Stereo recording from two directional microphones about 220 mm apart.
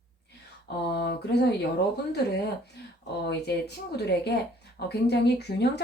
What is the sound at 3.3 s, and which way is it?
Speech, 50° left (ahead or behind).